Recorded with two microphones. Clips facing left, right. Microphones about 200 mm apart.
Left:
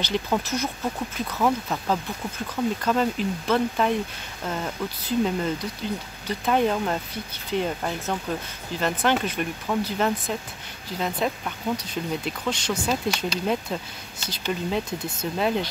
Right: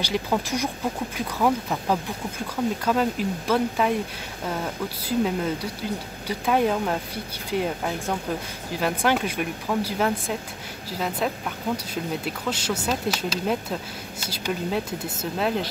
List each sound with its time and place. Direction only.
0.0 s speech: 10° right (ahead or behind)